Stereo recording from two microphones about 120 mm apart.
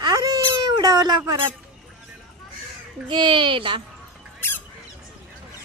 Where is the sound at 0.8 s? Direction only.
35° right (ahead or behind).